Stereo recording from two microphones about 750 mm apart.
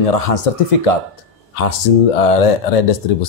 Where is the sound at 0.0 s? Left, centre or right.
Left.